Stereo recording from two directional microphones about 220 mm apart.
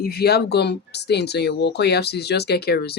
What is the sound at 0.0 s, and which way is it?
Speech, 45° left (ahead or behind).